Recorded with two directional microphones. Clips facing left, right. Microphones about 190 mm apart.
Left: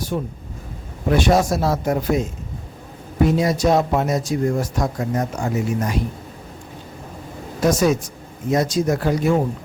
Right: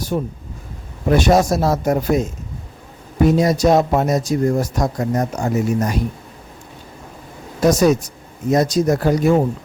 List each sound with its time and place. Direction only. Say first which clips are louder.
0.1 s speech: right 5 dB; 40° right (ahead or behind)
3.2 s speech: right 4 dB; 40° right (ahead or behind)
7.6 s speech: right 3 dB; 40° right (ahead or behind)